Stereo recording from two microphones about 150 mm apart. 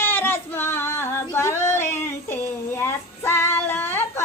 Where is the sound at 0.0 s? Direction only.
15° left (ahead or behind).